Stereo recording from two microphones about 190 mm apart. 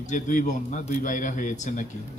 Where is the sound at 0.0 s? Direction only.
45° left (ahead or behind).